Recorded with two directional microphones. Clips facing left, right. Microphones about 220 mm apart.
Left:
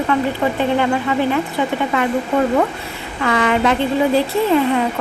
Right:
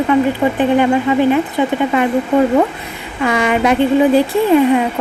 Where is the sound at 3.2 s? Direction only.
15° right (ahead or behind).